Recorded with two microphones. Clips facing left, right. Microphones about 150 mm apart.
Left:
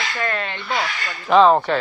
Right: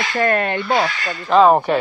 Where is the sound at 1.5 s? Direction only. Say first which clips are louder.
Right 2 dB; 15° right (ahead or behind).